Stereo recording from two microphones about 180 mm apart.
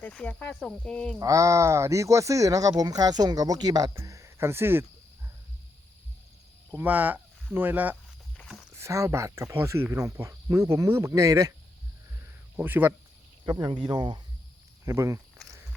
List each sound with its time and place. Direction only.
0.0 s speech: 5° left (ahead or behind)
1.2 s speech: 15° right (ahead or behind)
6.7 s speech: 10° right (ahead or behind)
8.4 s walk: 5° left (ahead or behind)
8.7 s speech: 15° right (ahead or behind)
12.5 s speech: 10° right (ahead or behind)
13.4 s speech: 25° right (ahead or behind)
15.4 s a sound: centre (ahead or behind)